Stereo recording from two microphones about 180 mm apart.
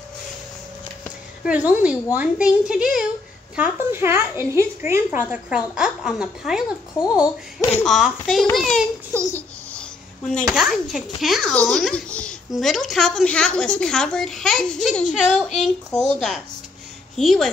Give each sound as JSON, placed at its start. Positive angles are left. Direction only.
{"t": 1.4, "sound": "a woman's voice", "side_deg": -10}